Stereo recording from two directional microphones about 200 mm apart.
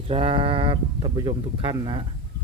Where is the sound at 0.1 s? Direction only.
25° right (ahead or behind).